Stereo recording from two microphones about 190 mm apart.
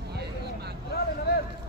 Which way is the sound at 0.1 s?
60° right (ahead or behind).